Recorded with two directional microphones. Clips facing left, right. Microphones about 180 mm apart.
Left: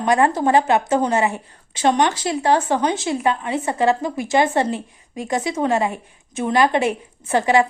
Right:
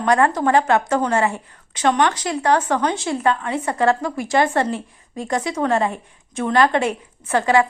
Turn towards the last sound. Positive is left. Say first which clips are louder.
# even
turn(degrees=20)  # may be behind; listen again after turning